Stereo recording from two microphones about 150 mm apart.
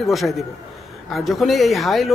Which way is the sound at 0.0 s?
Centre (ahead or behind).